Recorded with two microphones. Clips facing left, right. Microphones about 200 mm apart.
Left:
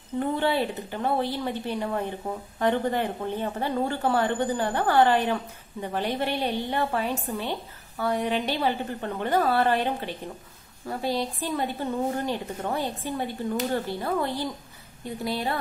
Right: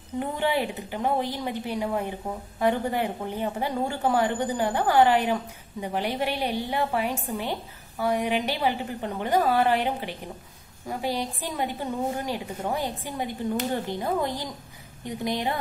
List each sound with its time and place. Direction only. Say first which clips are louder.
0.2 s a woman's voice: left 1 dB; 15° right (ahead or behind)